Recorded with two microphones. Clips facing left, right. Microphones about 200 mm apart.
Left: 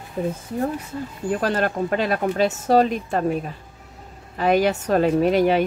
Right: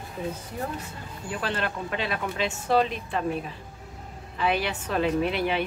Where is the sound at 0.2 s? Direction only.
55° left (ahead or behind).